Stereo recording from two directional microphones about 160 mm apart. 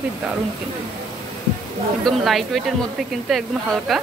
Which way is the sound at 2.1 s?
Centre (ahead or behind).